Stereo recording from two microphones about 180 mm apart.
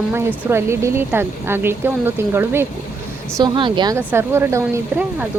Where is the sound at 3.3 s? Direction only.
25° right (ahead or behind).